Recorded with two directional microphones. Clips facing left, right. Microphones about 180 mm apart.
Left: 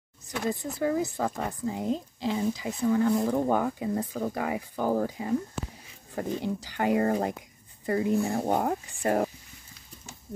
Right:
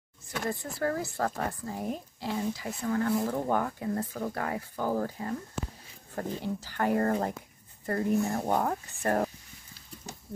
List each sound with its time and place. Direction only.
0.3 s speech: 15° left (ahead or behind)